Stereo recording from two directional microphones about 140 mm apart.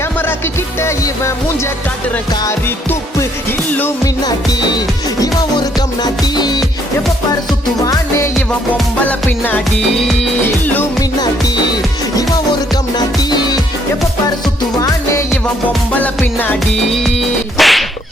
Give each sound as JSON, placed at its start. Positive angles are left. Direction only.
{"t": 0.8, "sound": "music", "side_deg": 20}
{"t": 3.7, "sound": "music", "side_deg": 15}
{"t": 4.0, "sound": "music", "side_deg": 30}
{"t": 9.0, "sound": "music", "side_deg": 15}
{"t": 11.2, "sound": "music", "side_deg": 30}
{"t": 14.8, "sound": "music", "side_deg": 25}
{"t": 16.0, "sound": "music", "side_deg": 15}
{"t": 17.6, "sound": "whip", "side_deg": 0}